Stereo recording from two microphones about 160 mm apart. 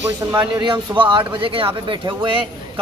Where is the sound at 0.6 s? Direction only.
30° right (ahead or behind).